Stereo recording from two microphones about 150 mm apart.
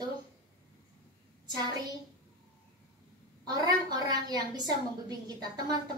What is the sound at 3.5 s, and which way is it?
A woman's voice, 25° right (ahead or behind).